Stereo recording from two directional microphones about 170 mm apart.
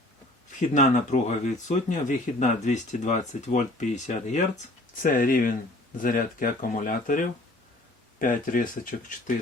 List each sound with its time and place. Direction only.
0.7 s speech: 45° left (ahead or behind)